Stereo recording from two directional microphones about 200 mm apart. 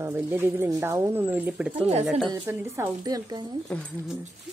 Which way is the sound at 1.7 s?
30° right (ahead or behind).